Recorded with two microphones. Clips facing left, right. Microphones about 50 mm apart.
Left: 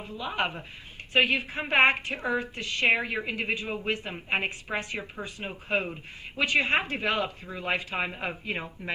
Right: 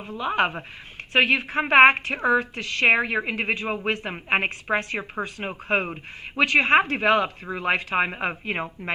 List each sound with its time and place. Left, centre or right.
0.0 s a woman's voice: right
1.8 s speech: right
2.8 s speech: right
6.3 s speech: right